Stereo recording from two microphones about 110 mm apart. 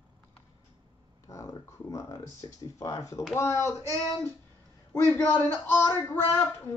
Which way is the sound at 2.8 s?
30° left (ahead or behind).